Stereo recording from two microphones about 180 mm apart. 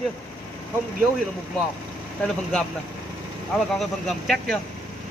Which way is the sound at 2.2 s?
5° left (ahead or behind).